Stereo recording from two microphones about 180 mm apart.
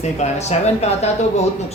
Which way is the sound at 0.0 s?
40° left (ahead or behind).